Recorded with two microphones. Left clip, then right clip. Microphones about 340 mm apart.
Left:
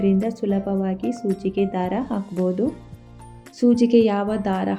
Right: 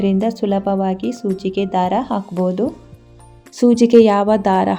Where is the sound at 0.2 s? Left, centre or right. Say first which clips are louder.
Right 6 dB; right.